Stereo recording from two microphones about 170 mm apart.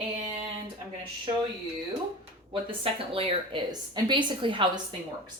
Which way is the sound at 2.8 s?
30° right (ahead or behind).